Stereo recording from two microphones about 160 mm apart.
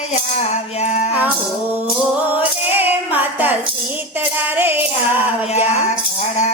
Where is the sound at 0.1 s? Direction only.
45° left (ahead or behind).